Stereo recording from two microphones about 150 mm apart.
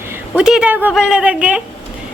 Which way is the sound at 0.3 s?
5° right (ahead or behind).